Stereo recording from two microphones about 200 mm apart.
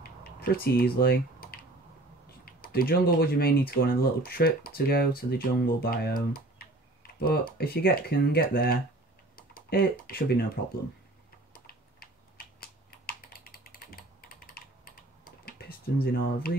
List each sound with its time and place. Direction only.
0.0 s typing: 50° left (ahead or behind)
2.4 s speech: 45° left (ahead or behind)
11.5 s typing: 50° left (ahead or behind)